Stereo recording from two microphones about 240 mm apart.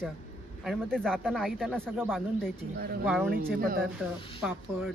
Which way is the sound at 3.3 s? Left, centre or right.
Right.